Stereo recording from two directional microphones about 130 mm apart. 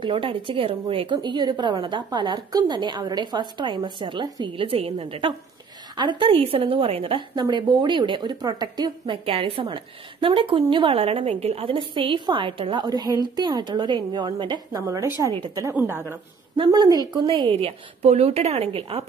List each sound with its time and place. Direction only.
0.0 s a woman's voice: 40° right (ahead or behind); by 16.2 s 15° right (ahead or behind)
16.5 s a woman's voice: 30° right (ahead or behind); by 19.0 s 45° right (ahead or behind)